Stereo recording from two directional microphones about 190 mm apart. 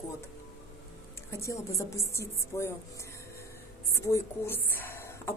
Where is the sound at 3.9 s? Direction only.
15° left (ahead or behind).